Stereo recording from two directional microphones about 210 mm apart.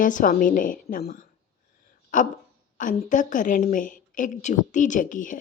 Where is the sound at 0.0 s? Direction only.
40° left (ahead or behind).